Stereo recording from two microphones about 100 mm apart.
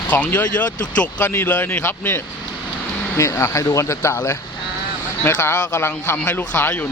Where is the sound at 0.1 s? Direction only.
15° left (ahead or behind).